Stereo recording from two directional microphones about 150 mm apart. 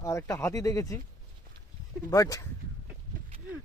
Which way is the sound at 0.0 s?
20° left (ahead or behind).